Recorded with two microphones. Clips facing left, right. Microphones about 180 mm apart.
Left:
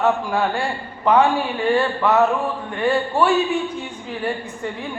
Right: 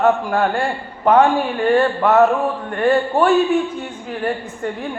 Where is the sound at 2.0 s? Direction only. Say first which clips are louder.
Right 3 dB; 40° right (ahead or behind).